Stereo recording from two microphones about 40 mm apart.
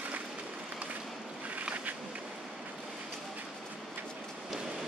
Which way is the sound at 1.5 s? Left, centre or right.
Right.